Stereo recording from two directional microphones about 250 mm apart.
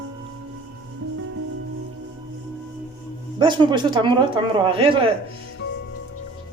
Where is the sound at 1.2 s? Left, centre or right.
Right.